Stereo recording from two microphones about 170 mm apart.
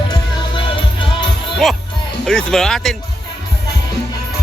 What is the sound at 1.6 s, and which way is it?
Music, centre (ahead or behind).